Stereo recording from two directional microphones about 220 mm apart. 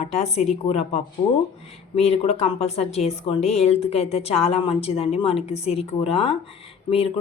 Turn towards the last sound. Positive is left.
turn(degrees=25)  # may be behind; listen again after turning